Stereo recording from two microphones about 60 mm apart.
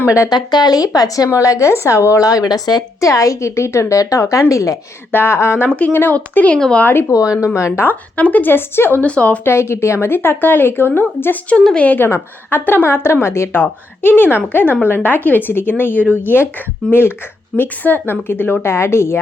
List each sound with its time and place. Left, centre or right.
0.6 s speech: left
1.4 s a woman's voice: left
5.1 s speech: left
5.6 s speech: left
7.1 s a woman's voice: left
7.9 s speech: left
9.0 s speech: left
9.4 s speech: left
12.0 s speech: left